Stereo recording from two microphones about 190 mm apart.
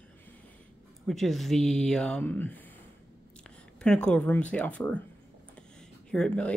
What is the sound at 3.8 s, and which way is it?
Speech, 5° left (ahead or behind).